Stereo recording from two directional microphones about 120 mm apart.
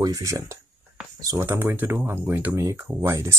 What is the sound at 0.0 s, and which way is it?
Speech, 30° right (ahead or behind).